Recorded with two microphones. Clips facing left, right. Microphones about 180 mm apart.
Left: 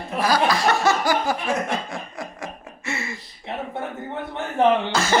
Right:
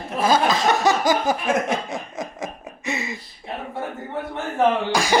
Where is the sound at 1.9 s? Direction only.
20° right (ahead or behind).